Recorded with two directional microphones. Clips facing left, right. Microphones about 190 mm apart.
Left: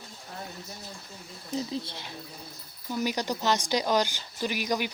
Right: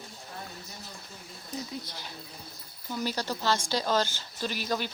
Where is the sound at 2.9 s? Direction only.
15° left (ahead or behind).